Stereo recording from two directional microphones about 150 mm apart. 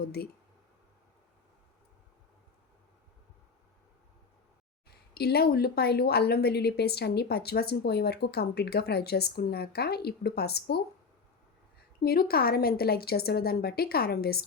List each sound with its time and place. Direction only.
0.0 s a woman's voice: 90° left
4.9 s a woman's voice: 90° left
11.9 s a woman's voice: 85° left